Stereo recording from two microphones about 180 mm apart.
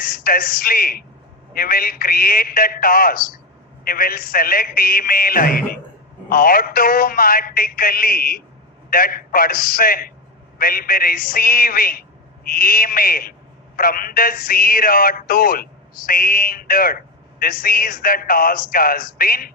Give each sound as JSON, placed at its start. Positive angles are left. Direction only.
{"t": 0.0, "sound": "speech", "side_deg": 50}